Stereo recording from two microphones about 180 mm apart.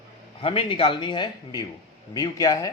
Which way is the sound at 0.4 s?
30° left (ahead or behind).